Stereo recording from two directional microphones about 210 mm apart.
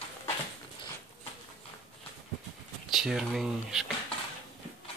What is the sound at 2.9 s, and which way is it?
Speech, centre (ahead or behind).